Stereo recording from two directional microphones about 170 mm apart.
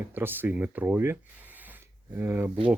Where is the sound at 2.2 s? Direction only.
15° right (ahead or behind).